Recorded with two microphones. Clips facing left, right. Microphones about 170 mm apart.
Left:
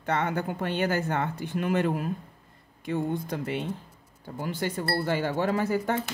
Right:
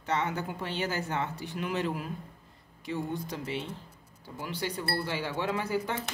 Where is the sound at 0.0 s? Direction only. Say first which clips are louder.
Left 3 dB; 55° left (ahead or behind).